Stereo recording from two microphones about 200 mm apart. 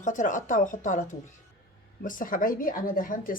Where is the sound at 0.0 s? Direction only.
40° left (ahead or behind).